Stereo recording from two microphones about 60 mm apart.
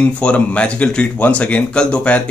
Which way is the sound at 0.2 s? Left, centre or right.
Centre.